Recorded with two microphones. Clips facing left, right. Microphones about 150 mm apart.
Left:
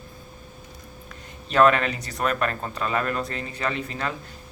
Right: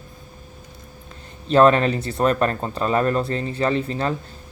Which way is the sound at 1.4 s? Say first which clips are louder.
Right 4 dB; 35° right (ahead or behind).